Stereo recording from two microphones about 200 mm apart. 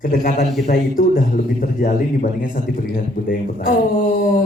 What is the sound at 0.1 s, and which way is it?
A woman's voice, 45° left (ahead or behind).